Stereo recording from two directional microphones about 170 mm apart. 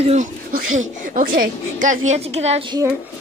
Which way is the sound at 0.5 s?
50° right (ahead or behind).